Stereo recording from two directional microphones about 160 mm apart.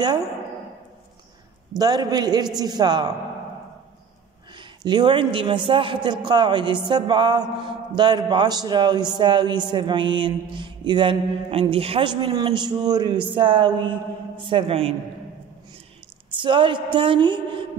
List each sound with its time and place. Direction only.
1.8 s music: 25° right (ahead or behind)
4.6 s speech: 30° right (ahead or behind)
6.0 s music: 30° right (ahead or behind)
9.2 s speech: 30° right (ahead or behind)
16.3 s speech: 30° right (ahead or behind)